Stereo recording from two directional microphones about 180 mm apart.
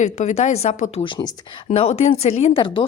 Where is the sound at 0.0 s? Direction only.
40° left (ahead or behind).